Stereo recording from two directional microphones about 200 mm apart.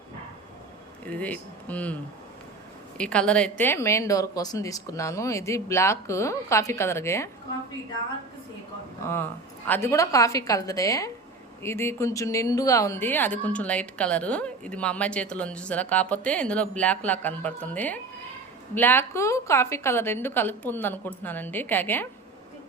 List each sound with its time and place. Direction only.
1.0 s speech: 5° left (ahead or behind)
3.0 s speech: 5° left (ahead or behind)
9.0 s speech: 10° left (ahead or behind)